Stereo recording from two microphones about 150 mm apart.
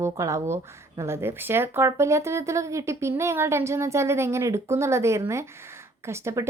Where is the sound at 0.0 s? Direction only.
20° right (ahead or behind).